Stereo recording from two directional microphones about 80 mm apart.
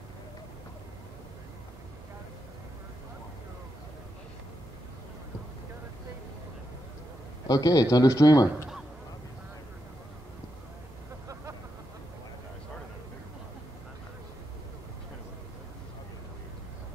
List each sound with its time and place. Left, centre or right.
7.4 s a man's voice: left